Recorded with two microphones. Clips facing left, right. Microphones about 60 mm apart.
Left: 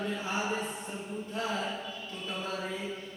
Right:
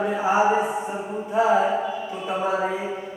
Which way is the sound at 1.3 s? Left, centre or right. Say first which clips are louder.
Right 16 dB; centre.